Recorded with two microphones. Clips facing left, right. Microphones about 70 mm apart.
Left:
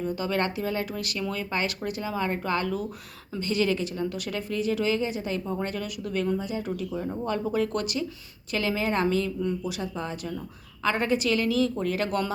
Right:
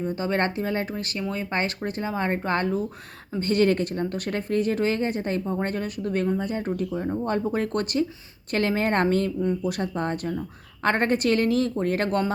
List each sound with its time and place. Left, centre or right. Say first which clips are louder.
0.0 s speech: right 2 dB; right
3.4 s speech: right 4 dB; right